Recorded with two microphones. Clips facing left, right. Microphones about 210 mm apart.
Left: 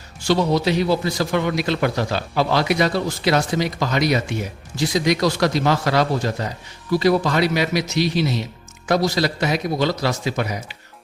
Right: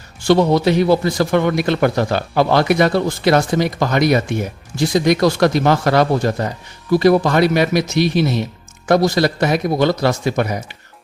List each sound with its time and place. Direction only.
0.2 s a man's voice: 55° right (ahead or behind)